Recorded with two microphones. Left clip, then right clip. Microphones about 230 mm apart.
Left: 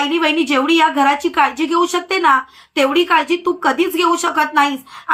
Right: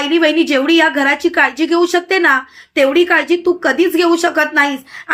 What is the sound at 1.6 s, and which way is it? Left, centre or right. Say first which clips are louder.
Speech: right 3 dB; centre.